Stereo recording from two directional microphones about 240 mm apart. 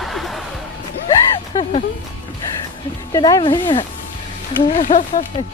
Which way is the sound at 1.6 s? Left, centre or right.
Left.